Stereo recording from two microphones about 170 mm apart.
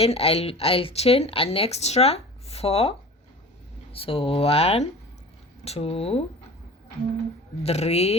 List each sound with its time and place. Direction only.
0.0 s speech: 35° left (ahead or behind)
3.9 s speech: 35° left (ahead or behind)
7.6 s speech: 40° left (ahead or behind)